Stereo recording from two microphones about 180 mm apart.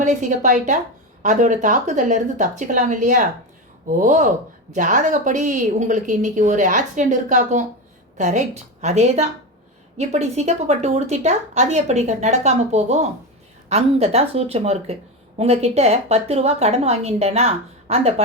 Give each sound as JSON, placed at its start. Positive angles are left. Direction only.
{"t": 0.0, "sound": "a woman's voice", "side_deg": -40}